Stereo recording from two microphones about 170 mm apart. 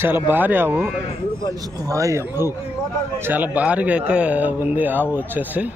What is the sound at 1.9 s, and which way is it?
A man's voice, 20° right (ahead or behind).